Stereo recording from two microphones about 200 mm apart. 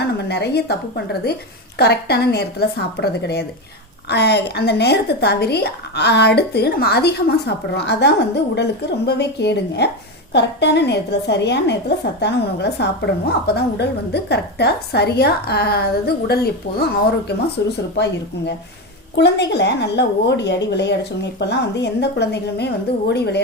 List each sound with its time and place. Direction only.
0.0 s a woman's voice: 55° left (ahead or behind)
17.9 s a woman's voice: 60° left (ahead or behind)